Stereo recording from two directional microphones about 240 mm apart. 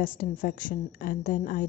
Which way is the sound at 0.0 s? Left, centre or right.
Left.